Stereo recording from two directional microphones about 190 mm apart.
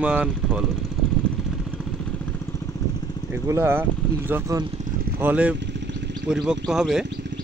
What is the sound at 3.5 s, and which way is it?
Speech, 10° right (ahead or behind).